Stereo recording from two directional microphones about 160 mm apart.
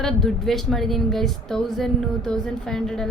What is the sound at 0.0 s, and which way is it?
A woman's voice, centre (ahead or behind).